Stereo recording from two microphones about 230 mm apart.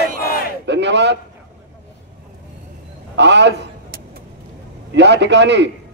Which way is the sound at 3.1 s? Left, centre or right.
Right.